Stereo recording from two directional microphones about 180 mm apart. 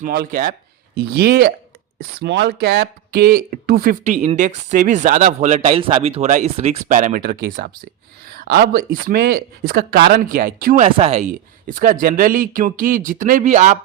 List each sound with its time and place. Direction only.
0.0 s speech: 55° right (ahead or behind)
0.9 s speech: 60° right (ahead or behind)
2.0 s speech: 70° right (ahead or behind); by 3.9 s 55° right (ahead or behind)
4.0 s speech: 40° right (ahead or behind)